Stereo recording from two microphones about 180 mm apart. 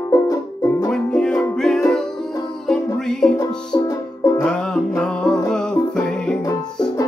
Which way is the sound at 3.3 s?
20° left (ahead or behind).